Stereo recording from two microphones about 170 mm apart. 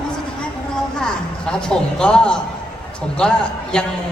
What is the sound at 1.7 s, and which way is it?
A man's voice, 5° left (ahead or behind).